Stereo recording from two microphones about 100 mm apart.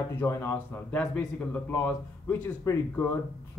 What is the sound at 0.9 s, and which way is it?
A man's voice, 15° left (ahead or behind).